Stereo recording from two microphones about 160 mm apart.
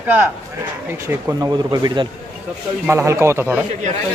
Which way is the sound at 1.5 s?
25° right (ahead or behind).